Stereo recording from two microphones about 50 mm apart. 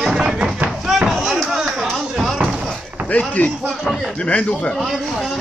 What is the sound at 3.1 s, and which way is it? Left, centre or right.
Speech, left.